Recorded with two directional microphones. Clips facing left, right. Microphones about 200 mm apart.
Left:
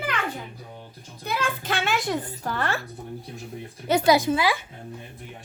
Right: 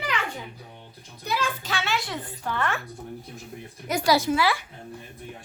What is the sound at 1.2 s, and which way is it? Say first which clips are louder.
A child's voice: left 1 dB; 55° left (ahead or behind).